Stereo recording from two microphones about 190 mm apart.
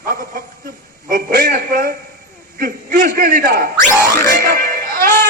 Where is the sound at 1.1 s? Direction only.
50° right (ahead or behind).